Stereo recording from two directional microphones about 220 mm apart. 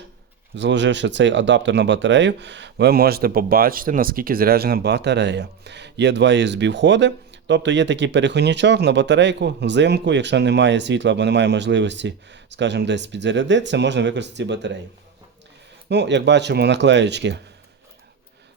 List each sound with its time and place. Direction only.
0.5 s speech: 55° right (ahead or behind)
15.9 s speech: 50° right (ahead or behind)